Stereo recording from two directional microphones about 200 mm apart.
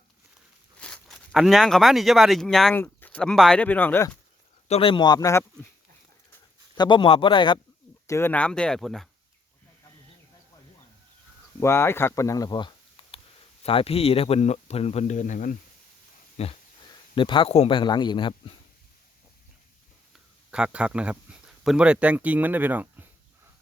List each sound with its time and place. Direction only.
0.8 s speech: 5° left (ahead or behind)
4.7 s speech: 25° left (ahead or behind)
6.7 s speech: 25° left (ahead or behind)
8.0 s speech: 15° left (ahead or behind)
11.6 s speech: 10° left (ahead or behind)
20.5 s speech: 5° right (ahead or behind)